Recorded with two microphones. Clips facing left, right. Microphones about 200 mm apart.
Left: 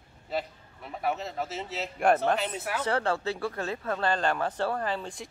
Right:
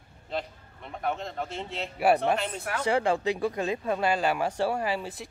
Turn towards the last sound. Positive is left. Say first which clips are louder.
# right 2 dB
turn(degrees=-5)  # may be behind; listen again after turning